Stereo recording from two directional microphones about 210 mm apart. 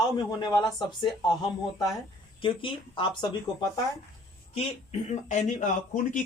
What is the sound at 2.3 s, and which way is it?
Speech, 25° left (ahead or behind).